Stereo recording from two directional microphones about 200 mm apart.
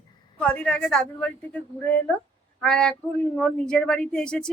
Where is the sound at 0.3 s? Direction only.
5° left (ahead or behind).